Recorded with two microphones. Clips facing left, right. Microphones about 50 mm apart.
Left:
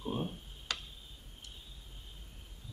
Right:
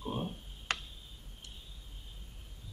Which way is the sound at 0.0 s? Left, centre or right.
Centre.